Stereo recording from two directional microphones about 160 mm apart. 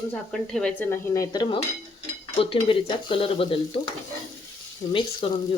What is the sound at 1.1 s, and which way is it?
Cutlery, 25° left (ahead or behind).